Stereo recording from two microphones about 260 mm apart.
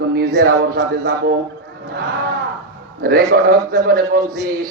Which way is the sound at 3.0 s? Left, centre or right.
Right.